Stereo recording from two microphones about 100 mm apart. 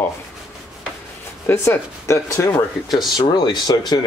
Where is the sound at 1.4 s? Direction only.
25° left (ahead or behind).